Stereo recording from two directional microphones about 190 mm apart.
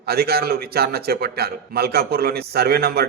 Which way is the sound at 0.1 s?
55° right (ahead or behind).